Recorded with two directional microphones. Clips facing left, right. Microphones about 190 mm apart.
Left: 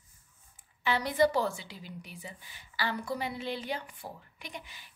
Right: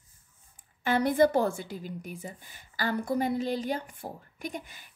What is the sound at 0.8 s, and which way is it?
A woman's voice, 50° right (ahead or behind).